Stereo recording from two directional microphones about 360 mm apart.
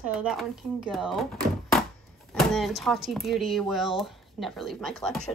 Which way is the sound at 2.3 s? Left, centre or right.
Centre.